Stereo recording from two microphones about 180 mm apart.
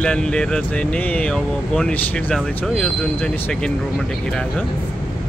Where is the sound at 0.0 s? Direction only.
5° left (ahead or behind).